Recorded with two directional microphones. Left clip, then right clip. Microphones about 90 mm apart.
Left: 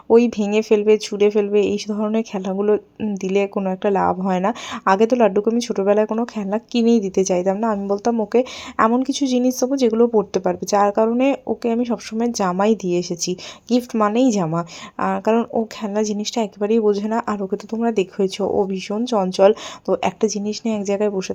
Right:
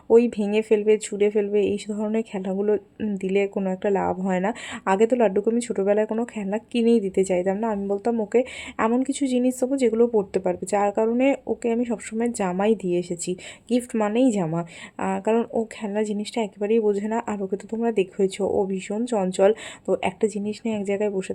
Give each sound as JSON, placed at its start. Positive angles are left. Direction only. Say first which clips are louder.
{"t": 0.1, "sound": "speech", "louder": "left 3 dB", "side_deg": 30}